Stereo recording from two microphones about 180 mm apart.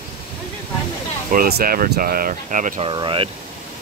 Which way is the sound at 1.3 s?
55° right (ahead or behind).